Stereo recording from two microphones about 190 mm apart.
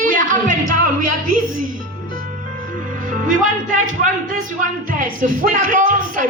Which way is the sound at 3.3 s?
45° right (ahead or behind).